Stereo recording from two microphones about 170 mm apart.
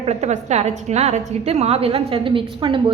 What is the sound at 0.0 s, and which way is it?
A woman's voice, 40° right (ahead or behind).